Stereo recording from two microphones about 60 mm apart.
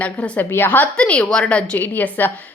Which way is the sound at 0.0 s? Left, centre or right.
Left.